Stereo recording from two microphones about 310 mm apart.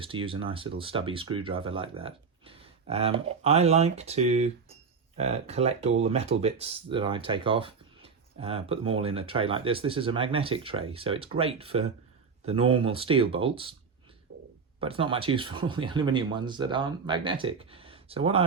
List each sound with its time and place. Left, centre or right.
0.0 s speech: centre
14.8 s speech: centre